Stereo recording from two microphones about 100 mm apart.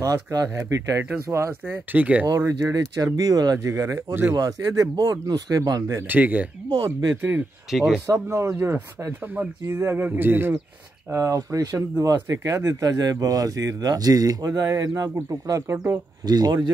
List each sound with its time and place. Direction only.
0.0 s speech: 35° right (ahead or behind); by 2.2 s 15° right (ahead or behind)
2.2 s speech: 35° right (ahead or behind)
6.0 s speech: 15° right (ahead or behind)
7.7 s speech: 5° right (ahead or behind)
8.1 s speech: 30° right (ahead or behind)
11.1 s speech: 35° right (ahead or behind)
16.3 s speech: 40° right (ahead or behind)